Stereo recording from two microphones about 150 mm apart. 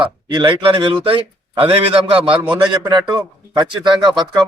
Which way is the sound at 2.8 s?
25° right (ahead or behind).